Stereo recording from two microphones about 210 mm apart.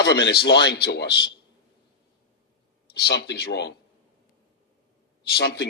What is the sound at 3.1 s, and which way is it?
Speech, 50° left (ahead or behind).